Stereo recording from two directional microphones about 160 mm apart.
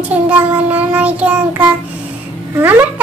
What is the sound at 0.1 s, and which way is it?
A child's voice, 10° right (ahead or behind).